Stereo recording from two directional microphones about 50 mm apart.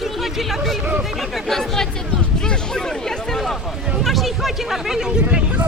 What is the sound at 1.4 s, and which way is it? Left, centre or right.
Speech, centre.